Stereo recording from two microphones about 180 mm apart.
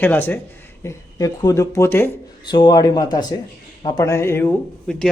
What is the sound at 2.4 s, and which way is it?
Speech, 25° left (ahead or behind).